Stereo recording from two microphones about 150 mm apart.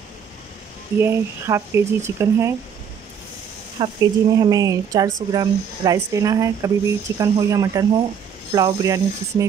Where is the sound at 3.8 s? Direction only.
25° right (ahead or behind).